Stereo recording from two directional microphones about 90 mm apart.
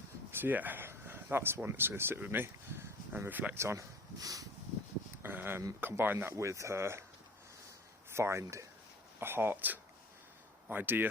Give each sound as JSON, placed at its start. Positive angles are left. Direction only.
{"t": 0.3, "sound": "speech", "side_deg": -25}
{"t": 5.2, "sound": "speech", "side_deg": -20}
{"t": 8.1, "sound": "speech", "side_deg": -30}